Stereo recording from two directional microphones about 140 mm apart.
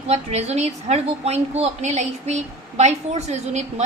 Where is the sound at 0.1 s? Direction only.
50° right (ahead or behind).